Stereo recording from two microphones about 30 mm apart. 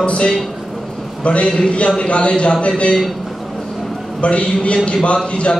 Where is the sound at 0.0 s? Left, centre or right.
Left.